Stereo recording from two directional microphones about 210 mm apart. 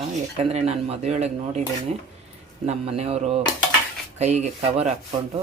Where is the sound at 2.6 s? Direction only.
30° right (ahead or behind).